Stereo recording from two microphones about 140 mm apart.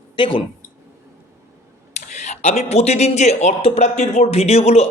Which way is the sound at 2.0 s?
55° left (ahead or behind).